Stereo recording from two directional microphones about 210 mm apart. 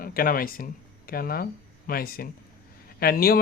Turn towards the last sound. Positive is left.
turn(degrees=45)  # may be behind; listen again after turning